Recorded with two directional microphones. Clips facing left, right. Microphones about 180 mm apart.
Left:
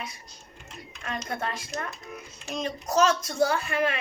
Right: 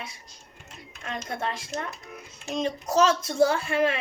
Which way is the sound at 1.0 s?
25° right (ahead or behind).